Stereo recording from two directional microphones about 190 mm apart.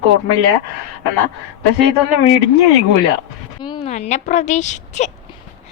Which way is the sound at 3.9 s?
35° left (ahead or behind).